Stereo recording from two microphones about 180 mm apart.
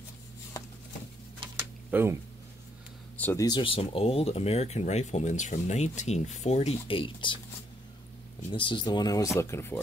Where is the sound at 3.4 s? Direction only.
25° left (ahead or behind).